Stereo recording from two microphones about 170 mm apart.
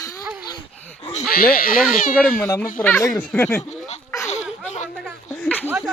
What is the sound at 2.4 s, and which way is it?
Speech, 15° left (ahead or behind).